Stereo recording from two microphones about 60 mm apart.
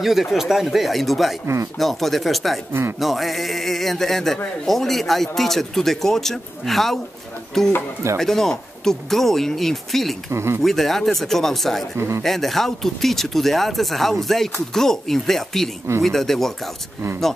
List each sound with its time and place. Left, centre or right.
0.0 s speech: centre
10.3 s speech: right
10.6 s speech: centre